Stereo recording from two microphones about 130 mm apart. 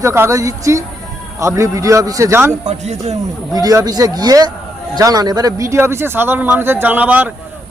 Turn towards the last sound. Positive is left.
turn(degrees=-10)  # may be behind; listen again after turning